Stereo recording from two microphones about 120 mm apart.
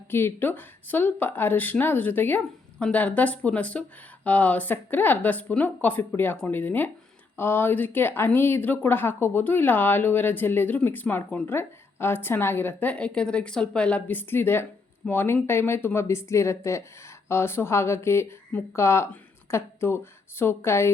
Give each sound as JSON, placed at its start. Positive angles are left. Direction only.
{"t": 0.1, "sound": "speech", "side_deg": 20}